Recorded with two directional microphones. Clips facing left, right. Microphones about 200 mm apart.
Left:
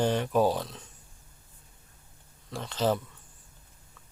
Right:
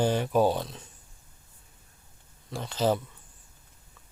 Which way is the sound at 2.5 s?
Centre (ahead or behind).